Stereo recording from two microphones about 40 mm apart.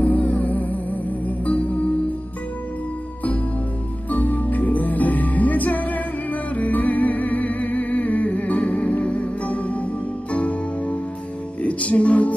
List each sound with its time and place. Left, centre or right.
0.0 s music: left
4.1 s music: left
8.5 s music: left
10.3 s music: left